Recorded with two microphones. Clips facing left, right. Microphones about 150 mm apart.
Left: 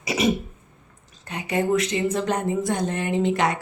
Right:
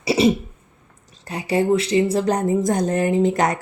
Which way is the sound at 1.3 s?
35° right (ahead or behind).